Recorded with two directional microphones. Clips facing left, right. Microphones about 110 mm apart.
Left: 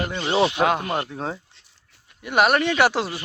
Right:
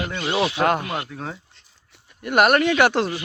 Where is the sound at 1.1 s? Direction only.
25° left (ahead or behind).